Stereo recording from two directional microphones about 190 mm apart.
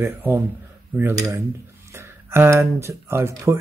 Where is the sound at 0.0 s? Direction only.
10° right (ahead or behind).